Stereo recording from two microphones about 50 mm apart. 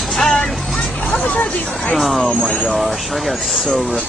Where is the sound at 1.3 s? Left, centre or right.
Left.